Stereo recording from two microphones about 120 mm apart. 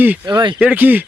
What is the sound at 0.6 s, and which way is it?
Speech, 15° right (ahead or behind).